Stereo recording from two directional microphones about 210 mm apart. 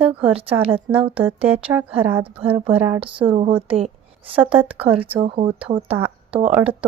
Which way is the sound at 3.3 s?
25° right (ahead or behind).